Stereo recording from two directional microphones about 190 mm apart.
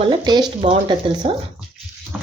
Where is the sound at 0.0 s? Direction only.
25° right (ahead or behind).